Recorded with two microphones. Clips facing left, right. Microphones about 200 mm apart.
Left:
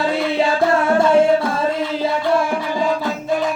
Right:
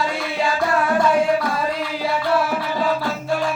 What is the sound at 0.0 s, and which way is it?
Music, 25° left (ahead or behind).